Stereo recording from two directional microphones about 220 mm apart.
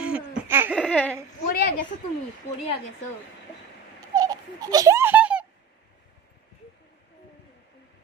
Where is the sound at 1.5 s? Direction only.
40° left (ahead or behind).